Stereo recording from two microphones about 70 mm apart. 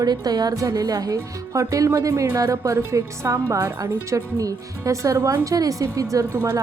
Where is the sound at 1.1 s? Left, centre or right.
Right.